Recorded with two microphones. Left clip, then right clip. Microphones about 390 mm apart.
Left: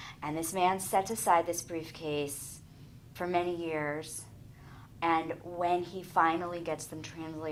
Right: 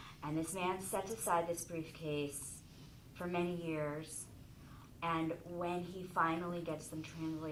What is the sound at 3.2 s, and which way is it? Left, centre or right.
Speech, left.